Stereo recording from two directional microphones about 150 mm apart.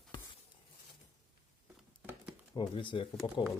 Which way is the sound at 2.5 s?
35° left (ahead or behind).